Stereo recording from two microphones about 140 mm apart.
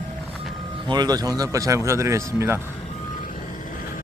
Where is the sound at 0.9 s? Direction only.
30° right (ahead or behind).